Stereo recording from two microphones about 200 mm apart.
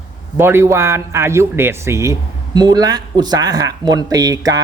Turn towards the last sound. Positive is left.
turn(degrees=-15)  # may be behind; listen again after turning